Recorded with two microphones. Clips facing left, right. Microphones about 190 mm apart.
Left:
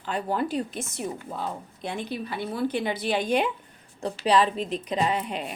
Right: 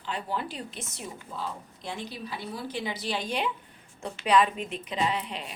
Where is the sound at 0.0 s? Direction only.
45° left (ahead or behind).